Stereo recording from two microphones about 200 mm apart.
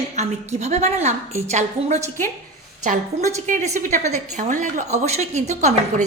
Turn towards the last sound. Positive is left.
turn(degrees=-35)  # may be behind; listen again after turning